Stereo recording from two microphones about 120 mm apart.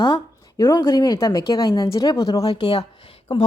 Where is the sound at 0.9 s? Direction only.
30° left (ahead or behind).